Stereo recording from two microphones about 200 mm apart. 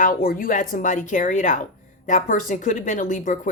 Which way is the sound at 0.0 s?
45° left (ahead or behind).